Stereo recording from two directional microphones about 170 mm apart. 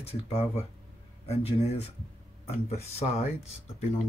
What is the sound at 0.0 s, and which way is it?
Speech, 40° left (ahead or behind).